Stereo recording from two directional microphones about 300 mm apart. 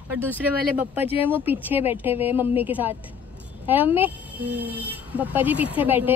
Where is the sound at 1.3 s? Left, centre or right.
Centre.